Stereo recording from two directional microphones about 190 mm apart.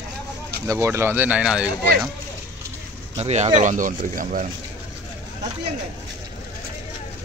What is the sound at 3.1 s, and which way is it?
Speech, 35° right (ahead or behind).